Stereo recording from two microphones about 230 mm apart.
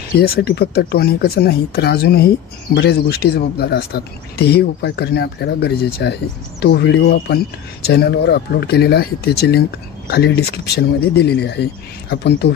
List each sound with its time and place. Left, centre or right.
0.2 s speech: left